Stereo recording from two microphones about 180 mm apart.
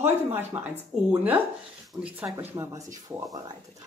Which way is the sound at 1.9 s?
5° right (ahead or behind).